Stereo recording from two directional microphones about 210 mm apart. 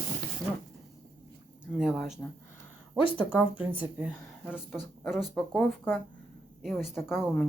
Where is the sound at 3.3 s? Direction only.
10° right (ahead or behind).